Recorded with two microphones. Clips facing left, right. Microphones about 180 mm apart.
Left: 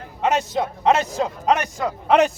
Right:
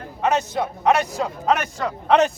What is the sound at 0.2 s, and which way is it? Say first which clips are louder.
A man's voice: even; 20° left (ahead or behind).